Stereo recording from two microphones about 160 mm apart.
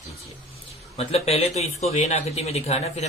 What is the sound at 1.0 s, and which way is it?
Speech, 40° left (ahead or behind).